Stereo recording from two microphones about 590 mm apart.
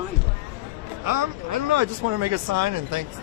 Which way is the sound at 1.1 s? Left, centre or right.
Right.